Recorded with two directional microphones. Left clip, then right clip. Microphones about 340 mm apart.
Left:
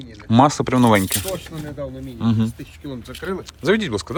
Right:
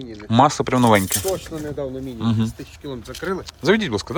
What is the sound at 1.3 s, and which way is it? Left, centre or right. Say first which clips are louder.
Speech: right 3 dB; right.